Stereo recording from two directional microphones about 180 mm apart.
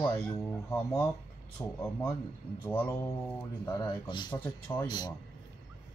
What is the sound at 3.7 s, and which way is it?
Speech, 25° left (ahead or behind).